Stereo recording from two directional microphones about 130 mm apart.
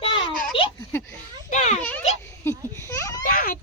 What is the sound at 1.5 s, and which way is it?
Speech, 65° left (ahead or behind).